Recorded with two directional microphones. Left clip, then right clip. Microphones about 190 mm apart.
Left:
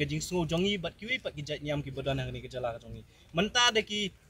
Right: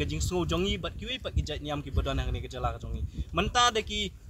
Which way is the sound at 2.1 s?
45° right (ahead or behind).